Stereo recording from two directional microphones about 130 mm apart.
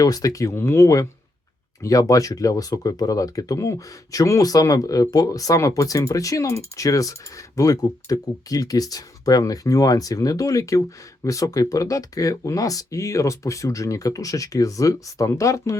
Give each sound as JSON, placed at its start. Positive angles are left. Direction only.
{"t": 0.0, "sound": "speech", "side_deg": 25}